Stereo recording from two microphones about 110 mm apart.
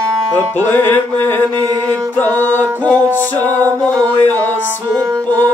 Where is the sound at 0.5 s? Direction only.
20° left (ahead or behind).